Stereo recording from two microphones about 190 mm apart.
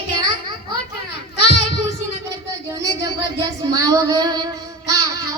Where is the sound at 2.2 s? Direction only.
15° right (ahead or behind).